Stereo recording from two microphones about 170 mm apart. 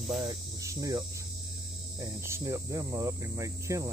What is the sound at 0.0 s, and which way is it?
Cricket, centre (ahead or behind).